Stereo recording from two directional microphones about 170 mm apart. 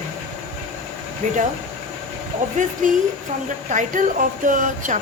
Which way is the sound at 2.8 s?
50° right (ahead or behind).